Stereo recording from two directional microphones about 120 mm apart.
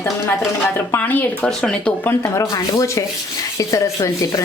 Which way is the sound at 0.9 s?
15° left (ahead or behind).